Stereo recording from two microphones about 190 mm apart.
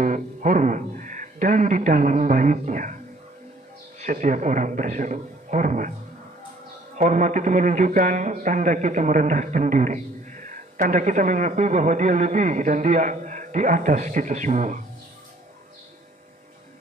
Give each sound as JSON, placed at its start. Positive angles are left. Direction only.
{"t": 0.0, "sound": "speech", "side_deg": -40}
{"t": 4.0, "sound": "a man's voice", "side_deg": -40}
{"t": 7.0, "sound": "a man's voice", "side_deg": -40}